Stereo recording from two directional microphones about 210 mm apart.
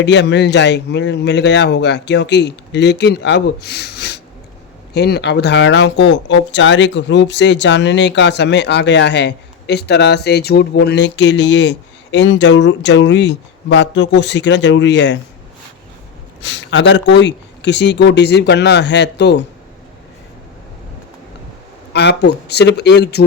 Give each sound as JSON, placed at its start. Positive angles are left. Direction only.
{"t": 0.0, "sound": "speech", "side_deg": 55}
{"t": 16.4, "sound": "speech", "side_deg": 60}
{"t": 21.9, "sound": "speech", "side_deg": 55}